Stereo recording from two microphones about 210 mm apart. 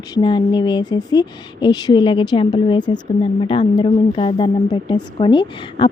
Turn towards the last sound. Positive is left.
turn(degrees=25)  # may be behind; listen again after turning